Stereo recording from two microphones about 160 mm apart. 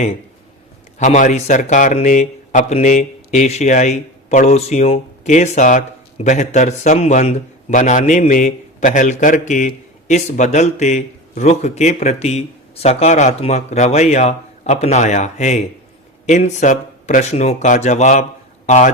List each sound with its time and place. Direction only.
0.9 s a man's voice: 50° left (ahead or behind)